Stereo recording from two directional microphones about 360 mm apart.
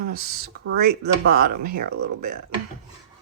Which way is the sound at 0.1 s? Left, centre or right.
Right.